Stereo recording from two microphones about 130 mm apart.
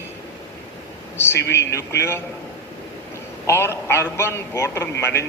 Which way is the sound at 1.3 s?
20° left (ahead or behind).